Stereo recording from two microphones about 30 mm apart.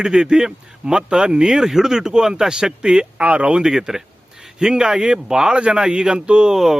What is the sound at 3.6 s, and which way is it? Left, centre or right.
Speech, centre.